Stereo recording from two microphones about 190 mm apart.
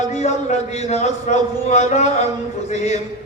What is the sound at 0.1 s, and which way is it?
A man's voice, 35° left (ahead or behind).